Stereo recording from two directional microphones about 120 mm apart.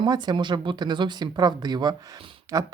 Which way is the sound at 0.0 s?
35° right (ahead or behind).